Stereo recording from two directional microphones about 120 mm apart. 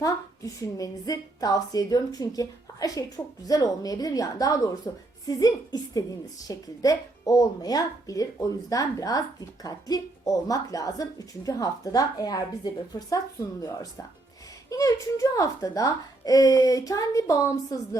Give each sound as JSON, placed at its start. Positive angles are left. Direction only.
{"t": 0.0, "sound": "a woman's voice", "side_deg": 30}